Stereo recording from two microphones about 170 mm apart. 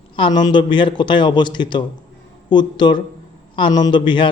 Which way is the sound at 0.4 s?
30° left (ahead or behind).